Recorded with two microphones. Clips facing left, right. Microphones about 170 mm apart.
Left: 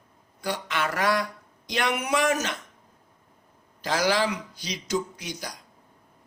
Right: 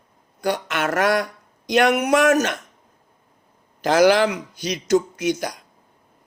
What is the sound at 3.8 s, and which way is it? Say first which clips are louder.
Speech: right 9 dB; 65° right (ahead or behind).